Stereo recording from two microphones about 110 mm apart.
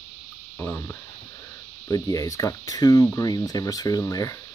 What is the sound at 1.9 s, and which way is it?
Speech, 35° left (ahead or behind).